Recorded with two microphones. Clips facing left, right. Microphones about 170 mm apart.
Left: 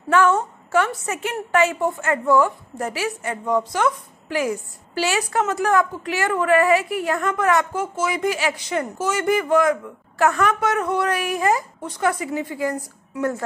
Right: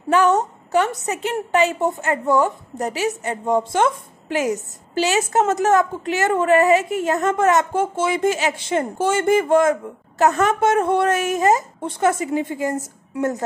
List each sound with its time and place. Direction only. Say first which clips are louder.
0.1 s a woman's voice: right 1 dB; 15° right (ahead or behind)
1.1 s a woman's voice: right 1 dB; 30° right (ahead or behind)
1.6 s a woman's voice: even; 20° right (ahead or behind)